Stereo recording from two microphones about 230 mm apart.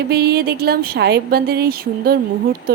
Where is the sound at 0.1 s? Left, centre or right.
Right.